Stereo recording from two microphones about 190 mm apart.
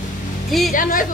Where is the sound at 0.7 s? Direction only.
45° left (ahead or behind).